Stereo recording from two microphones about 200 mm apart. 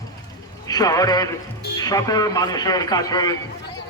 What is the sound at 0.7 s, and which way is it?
A man's voice, 20° left (ahead or behind).